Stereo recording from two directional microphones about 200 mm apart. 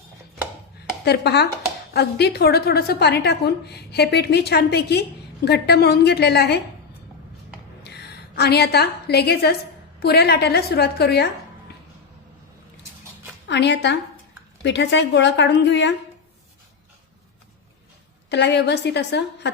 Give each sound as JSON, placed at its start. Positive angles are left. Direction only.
{"t": 1.0, "sound": "a woman's voice", "side_deg": 55}
{"t": 7.9, "sound": "a woman's voice", "side_deg": 55}
{"t": 13.5, "sound": "a woman's voice", "side_deg": 60}
{"t": 18.3, "sound": "a woman's voice", "side_deg": 60}